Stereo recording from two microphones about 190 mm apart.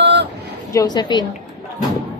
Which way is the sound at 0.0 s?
60° right (ahead or behind).